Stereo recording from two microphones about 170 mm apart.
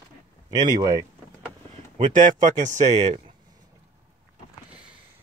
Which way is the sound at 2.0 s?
45° right (ahead or behind).